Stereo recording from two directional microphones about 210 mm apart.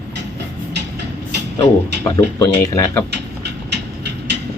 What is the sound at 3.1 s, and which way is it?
Vehicle, 55° right (ahead or behind).